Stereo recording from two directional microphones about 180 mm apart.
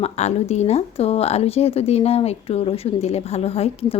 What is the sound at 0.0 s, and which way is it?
Speech, 40° left (ahead or behind).